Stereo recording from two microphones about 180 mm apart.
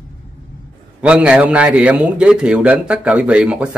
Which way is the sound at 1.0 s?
5° right (ahead or behind).